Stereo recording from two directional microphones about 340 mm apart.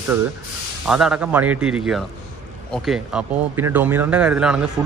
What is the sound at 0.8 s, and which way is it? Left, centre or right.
Speech, centre.